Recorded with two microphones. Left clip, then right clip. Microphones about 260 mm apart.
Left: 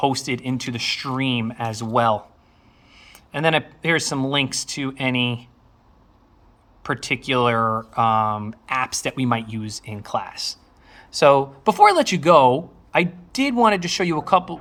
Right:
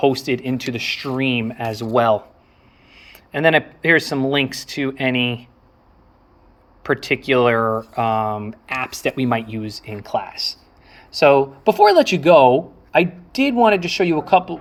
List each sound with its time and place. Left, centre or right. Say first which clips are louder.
0.0 s speech: right 4 dB; centre
6.8 s speech: right 4 dB; centre
10.2 s speech: right 4 dB; left
10.8 s a sound: right 1 dB; left
11.6 s speech: right 2 dB; centre